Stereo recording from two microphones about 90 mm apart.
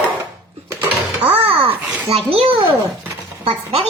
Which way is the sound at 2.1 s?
90° right.